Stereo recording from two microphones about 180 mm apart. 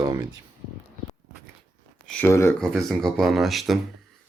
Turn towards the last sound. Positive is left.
turn(degrees=0)  # may be behind; listen again after turning